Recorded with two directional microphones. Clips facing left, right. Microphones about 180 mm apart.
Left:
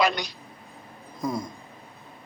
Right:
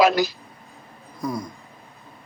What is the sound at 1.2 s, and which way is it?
Speech, 25° left (ahead or behind).